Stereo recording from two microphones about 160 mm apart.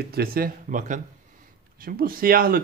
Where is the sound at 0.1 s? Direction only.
70° right (ahead or behind); by 1.0 s 55° right (ahead or behind).